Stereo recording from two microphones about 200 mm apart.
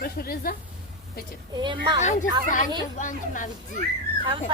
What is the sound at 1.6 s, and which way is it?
Speech, 25° right (ahead or behind).